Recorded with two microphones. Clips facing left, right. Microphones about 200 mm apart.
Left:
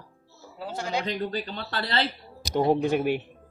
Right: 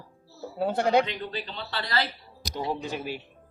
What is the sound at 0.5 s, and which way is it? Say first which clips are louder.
Speech: right 8 dB; 60° right (ahead or behind).